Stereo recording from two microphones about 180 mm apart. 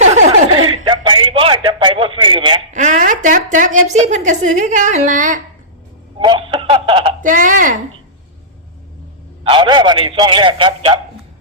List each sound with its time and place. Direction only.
0.0 s chuckle: 40° right (ahead or behind)
2.7 s a woman's voice: 40° right (ahead or behind)
6.1 s speech: 25° right (ahead or behind)
7.2 s speech: 45° right (ahead or behind)
9.4 s a man's voice: 30° right (ahead or behind)